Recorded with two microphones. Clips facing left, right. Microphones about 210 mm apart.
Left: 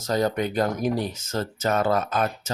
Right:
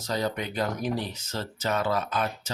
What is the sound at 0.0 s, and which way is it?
Speech, 45° left (ahead or behind).